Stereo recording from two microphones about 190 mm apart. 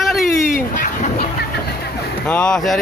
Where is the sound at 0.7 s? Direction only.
45° left (ahead or behind).